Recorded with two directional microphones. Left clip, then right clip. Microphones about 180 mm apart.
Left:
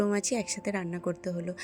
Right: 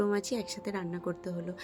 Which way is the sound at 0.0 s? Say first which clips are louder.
Left 2 dB; 20° left (ahead or behind).